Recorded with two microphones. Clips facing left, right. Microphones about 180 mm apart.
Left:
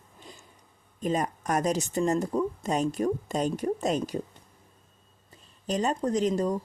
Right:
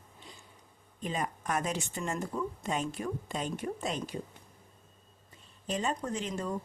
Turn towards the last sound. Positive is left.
turn(degrees=35)  # may be behind; listen again after turning